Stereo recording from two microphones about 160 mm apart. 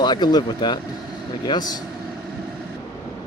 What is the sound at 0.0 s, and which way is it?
Speech, 25° left (ahead or behind).